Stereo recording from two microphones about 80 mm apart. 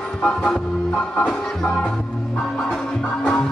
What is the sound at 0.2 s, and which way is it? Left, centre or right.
Music, centre.